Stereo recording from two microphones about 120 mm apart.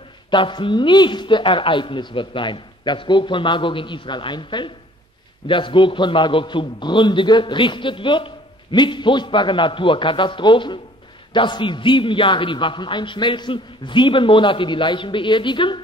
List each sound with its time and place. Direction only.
0.3 s a man's voice: 40° left (ahead or behind)